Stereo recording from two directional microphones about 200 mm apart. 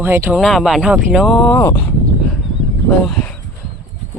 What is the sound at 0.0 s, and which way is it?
Speech, 10° right (ahead or behind).